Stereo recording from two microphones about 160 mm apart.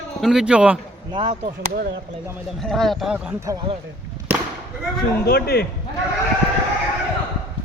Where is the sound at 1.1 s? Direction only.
35° right (ahead or behind).